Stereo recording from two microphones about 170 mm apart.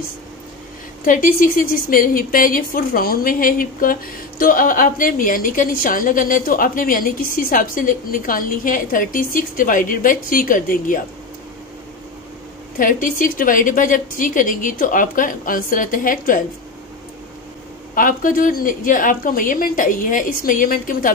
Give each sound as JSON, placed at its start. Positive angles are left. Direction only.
{"t": 1.0, "sound": "a woman's voice", "side_deg": 55}
{"t": 12.7, "sound": "a woman's voice", "side_deg": 55}
{"t": 17.9, "sound": "a woman's voice", "side_deg": 55}